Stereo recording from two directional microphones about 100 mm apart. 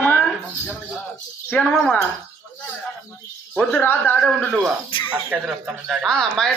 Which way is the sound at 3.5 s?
20° left (ahead or behind).